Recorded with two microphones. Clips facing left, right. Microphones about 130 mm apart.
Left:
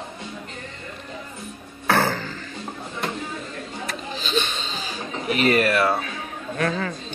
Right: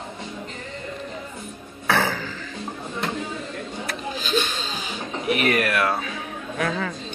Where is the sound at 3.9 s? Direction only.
5° right (ahead or behind).